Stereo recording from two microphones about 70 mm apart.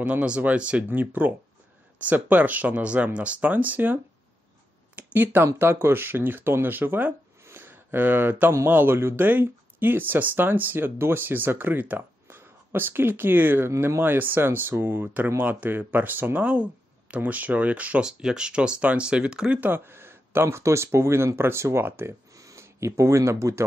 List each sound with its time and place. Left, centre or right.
0.0 s speech: centre
7.4 s a sound: right
8.5 s speech: right
18.0 s speech: centre
19.6 s speech: right
22.3 s a sound: right